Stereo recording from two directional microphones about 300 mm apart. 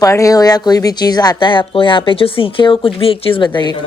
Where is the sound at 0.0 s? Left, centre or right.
Centre.